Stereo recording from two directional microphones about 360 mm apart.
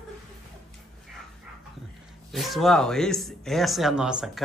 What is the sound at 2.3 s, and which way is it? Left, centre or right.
Speech, centre.